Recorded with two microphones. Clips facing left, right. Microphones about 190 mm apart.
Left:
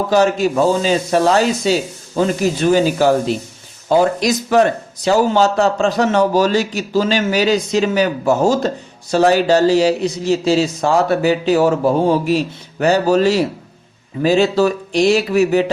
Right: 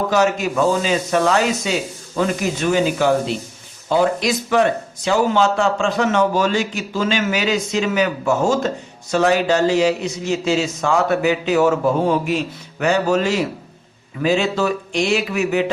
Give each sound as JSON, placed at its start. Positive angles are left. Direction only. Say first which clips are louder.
{"t": 0.1, "sound": "a man's voice", "louder": "left 7 dB", "side_deg": 30}